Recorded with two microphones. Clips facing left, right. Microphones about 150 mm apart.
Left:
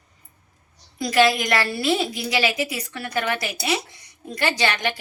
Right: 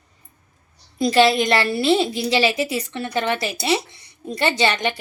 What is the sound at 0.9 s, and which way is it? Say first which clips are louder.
A woman's voice: right 3 dB; 25° right (ahead or behind).